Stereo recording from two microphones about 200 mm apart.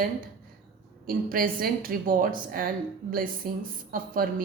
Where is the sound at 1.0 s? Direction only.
45° right (ahead or behind).